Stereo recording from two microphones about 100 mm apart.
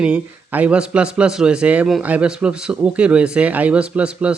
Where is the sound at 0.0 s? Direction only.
10° right (ahead or behind).